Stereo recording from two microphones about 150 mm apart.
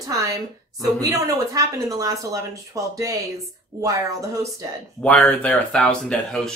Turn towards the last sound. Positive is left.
turn(degrees=5)  # may be behind; listen again after turning